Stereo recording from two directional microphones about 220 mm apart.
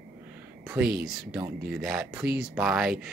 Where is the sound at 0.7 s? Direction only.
5° right (ahead or behind).